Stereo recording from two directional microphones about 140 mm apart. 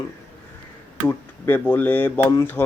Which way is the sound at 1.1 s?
15° left (ahead or behind).